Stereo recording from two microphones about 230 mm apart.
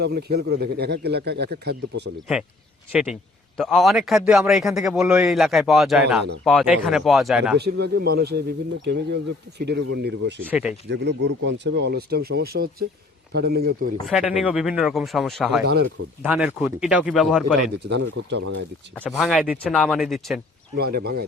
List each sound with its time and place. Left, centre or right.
0.0 s speech: right
3.6 s a man's voice: centre
7.6 s speech: right
10.5 s speech: centre
10.8 s a man's voice: right
14.0 s a man's voice: centre
15.6 s speech: right
16.2 s a man's voice: centre
17.9 s speech: right
18.9 s a man's voice: centre
20.7 s speech: right